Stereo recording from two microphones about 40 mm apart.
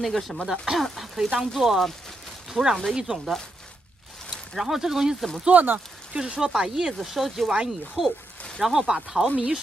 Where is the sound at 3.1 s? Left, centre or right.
Right.